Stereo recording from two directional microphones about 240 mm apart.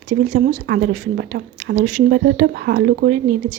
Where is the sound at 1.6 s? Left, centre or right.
Right.